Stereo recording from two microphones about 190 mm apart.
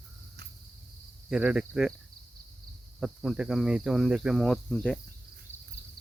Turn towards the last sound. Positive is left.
turn(degrees=5)  # may be behind; listen again after turning